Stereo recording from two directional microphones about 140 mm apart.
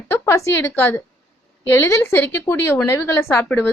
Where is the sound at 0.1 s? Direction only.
20° left (ahead or behind).